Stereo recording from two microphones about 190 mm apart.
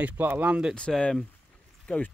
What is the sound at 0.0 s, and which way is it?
Speech, 10° right (ahead or behind).